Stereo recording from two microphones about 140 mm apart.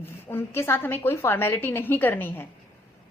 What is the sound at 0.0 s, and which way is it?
A woman's voice, 15° left (ahead or behind).